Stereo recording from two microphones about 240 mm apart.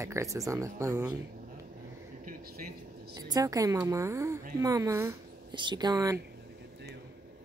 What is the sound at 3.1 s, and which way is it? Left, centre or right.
A woman's voice, centre.